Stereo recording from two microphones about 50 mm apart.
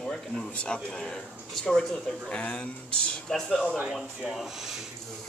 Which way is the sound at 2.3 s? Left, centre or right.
Left.